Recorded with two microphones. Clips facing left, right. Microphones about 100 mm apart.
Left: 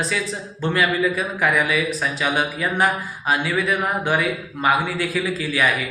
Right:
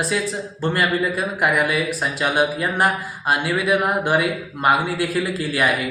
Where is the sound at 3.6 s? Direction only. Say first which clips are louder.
Right 2 dB; 5° right (ahead or behind).